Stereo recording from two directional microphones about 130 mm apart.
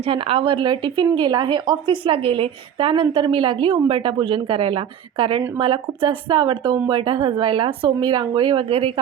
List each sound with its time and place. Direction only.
0.1 s a woman's voice: 45° right (ahead or behind)